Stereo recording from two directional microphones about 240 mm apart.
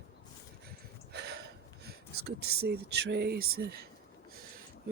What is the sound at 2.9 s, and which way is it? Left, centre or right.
Speech, right.